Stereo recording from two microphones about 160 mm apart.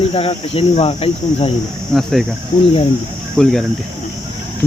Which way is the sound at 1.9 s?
Centre (ahead or behind).